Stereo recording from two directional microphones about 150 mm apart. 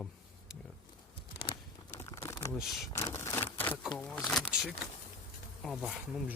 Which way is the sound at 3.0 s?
20° left (ahead or behind).